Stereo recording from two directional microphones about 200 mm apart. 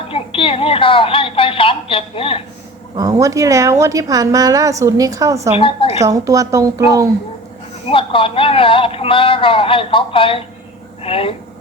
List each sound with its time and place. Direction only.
0.1 s a woman's voice: 25° left (ahead or behind)
2.9 s a woman's voice: 15° right (ahead or behind)
5.5 s speech: 25° left (ahead or behind)
6.0 s a woman's voice: 15° right (ahead or behind)
7.9 s speech: 25° left (ahead or behind)